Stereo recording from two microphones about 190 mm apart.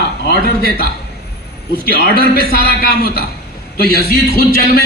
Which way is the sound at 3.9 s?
55° right (ahead or behind).